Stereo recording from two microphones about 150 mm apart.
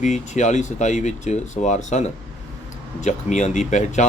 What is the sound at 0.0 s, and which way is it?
Speech, 50° left (ahead or behind).